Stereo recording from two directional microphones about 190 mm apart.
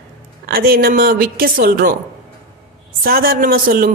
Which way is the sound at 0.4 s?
55° right (ahead or behind).